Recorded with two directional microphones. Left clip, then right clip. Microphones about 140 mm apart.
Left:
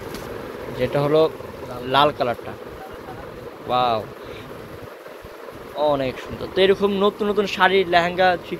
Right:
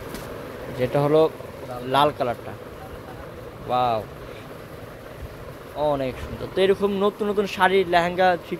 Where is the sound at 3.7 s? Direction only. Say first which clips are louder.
Left 2 dB; 5° right (ahead or behind).